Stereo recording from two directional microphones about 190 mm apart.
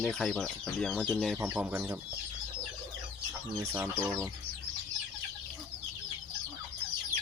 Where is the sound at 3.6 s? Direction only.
10° right (ahead or behind).